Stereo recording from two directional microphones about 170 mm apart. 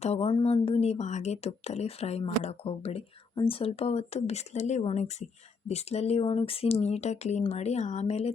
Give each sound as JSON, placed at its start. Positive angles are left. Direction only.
{"t": 0.0, "sound": "speech", "side_deg": 35}